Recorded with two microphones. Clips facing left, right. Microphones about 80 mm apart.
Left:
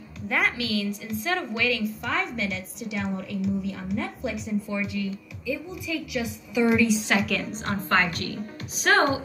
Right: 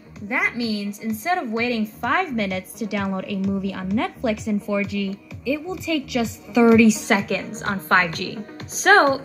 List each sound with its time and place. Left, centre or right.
0.3 s a woman's voice: centre; by 4.6 s right
4.9 s a woman's voice: right
7.1 s a woman's voice: right